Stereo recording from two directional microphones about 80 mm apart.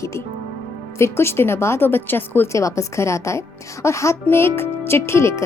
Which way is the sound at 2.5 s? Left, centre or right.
Left.